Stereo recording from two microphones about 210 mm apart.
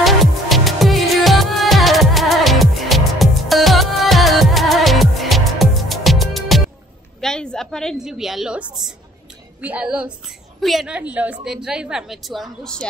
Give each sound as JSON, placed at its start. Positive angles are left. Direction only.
{"t": 0.0, "sound": "music", "side_deg": 0}
{"t": 7.2, "sound": "a sound", "side_deg": 5}
{"t": 9.6, "sound": "a woman's voice", "side_deg": -5}